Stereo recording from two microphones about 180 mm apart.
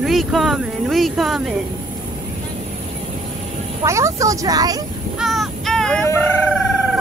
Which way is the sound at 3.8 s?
15° right (ahead or behind).